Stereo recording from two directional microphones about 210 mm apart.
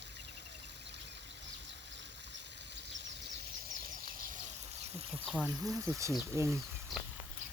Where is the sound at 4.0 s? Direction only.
45° right (ahead or behind).